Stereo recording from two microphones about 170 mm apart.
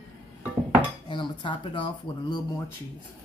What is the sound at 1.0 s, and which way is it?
Speech, 30° left (ahead or behind).